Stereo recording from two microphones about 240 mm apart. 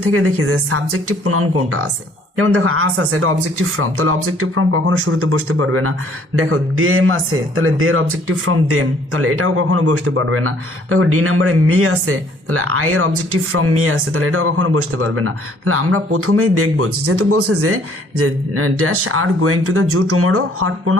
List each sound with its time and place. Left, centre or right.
0.0 s a man's voice: right